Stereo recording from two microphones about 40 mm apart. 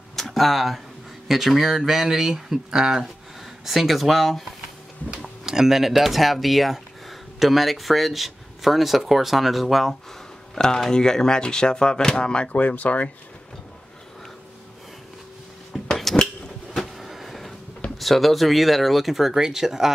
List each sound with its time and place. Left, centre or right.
0.1 s a sound: centre
1.2 s speech: centre
3.6 s speech: centre
5.1 s speech: centre
10.6 s speech: centre
12.5 s speech: left
15.7 s a sound: centre
16.8 s vehicle: centre
17.9 s speech: centre